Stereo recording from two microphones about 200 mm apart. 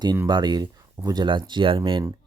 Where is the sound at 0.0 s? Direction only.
20° right (ahead or behind).